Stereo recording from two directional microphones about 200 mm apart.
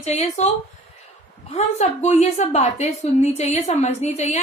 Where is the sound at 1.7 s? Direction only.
35° left (ahead or behind).